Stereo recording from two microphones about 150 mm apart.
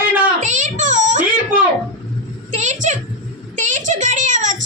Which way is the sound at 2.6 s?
55° right (ahead or behind).